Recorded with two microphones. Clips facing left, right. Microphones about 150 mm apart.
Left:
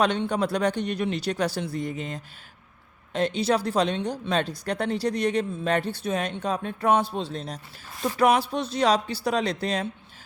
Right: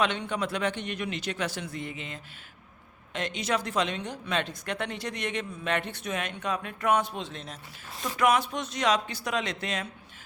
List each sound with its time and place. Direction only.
0.0 s a woman's voice: 35° left (ahead or behind)